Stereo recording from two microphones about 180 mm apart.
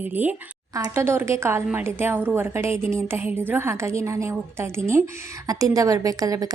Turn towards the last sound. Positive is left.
turn(degrees=-20)  # may be behind; listen again after turning